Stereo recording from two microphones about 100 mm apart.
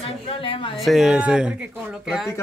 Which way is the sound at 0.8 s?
5° right (ahead or behind).